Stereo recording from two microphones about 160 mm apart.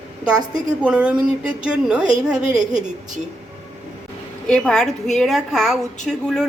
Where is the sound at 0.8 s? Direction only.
5° right (ahead or behind).